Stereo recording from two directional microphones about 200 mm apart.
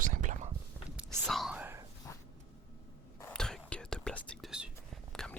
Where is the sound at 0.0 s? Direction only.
40° right (ahead or behind).